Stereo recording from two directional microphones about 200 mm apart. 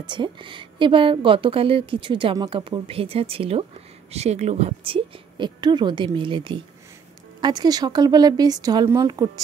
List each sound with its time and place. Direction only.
0.0 s a woman's voice: 25° right (ahead or behind)